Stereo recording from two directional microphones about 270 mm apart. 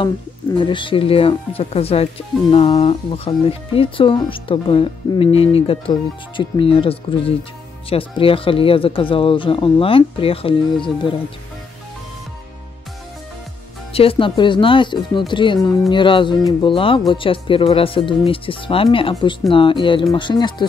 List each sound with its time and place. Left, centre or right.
0.6 s speech: centre
13.9 s speech: centre